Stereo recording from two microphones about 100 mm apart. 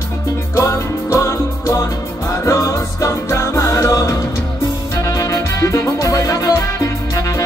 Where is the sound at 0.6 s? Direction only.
25° left (ahead or behind).